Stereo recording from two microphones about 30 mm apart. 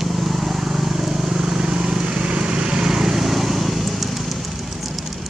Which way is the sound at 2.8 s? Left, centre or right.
Centre.